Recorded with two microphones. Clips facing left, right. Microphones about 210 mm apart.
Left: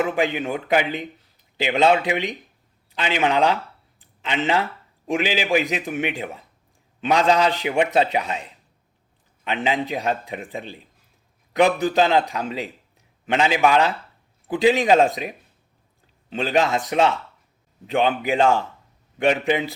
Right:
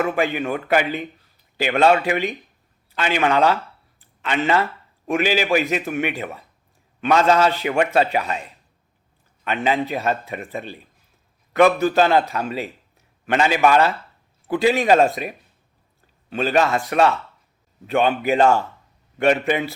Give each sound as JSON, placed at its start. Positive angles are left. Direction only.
{"t": 0.0, "sound": "a man's voice", "side_deg": 15}
{"t": 4.0, "sound": "a sound", "side_deg": 15}
{"t": 5.0, "sound": "a man's voice", "side_deg": 15}
{"t": 9.4, "sound": "a man's voice", "side_deg": 15}